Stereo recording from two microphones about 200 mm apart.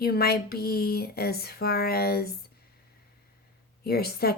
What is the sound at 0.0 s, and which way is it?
Speech, 50° left (ahead or behind).